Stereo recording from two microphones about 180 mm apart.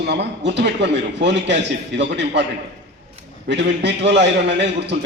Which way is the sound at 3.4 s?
75° right (ahead or behind).